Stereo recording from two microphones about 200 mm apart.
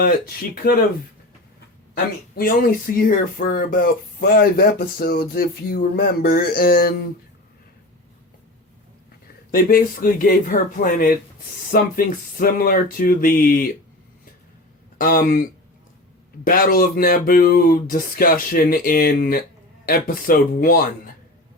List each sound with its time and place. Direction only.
0.0 s speech: 50° left (ahead or behind)
2.3 s speech: 45° left (ahead or behind)
9.2 s speech: 50° left (ahead or behind)
14.9 s speech: 45° left (ahead or behind)